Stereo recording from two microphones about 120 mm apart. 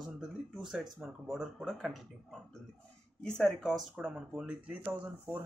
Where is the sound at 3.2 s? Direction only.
5° left (ahead or behind).